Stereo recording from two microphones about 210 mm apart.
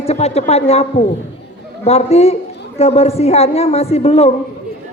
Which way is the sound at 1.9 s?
30° left (ahead or behind).